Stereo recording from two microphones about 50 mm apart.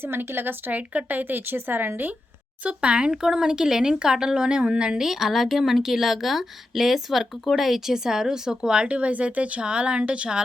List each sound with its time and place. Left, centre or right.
0.0 s speech: right
2.6 s speech: right